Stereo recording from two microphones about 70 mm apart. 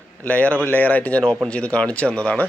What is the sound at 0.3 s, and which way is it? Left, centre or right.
Speech, centre.